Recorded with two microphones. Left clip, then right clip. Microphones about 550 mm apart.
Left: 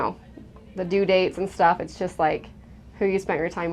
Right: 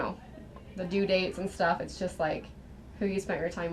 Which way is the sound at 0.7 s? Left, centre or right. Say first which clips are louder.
Left 8 dB; left.